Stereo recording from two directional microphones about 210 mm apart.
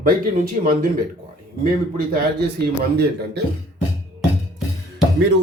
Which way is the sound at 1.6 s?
45° right (ahead or behind).